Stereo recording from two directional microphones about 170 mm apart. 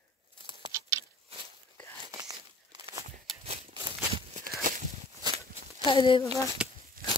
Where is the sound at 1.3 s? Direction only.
35° right (ahead or behind).